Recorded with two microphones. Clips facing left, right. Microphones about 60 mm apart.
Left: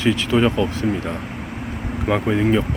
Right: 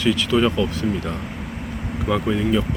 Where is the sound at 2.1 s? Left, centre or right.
Left.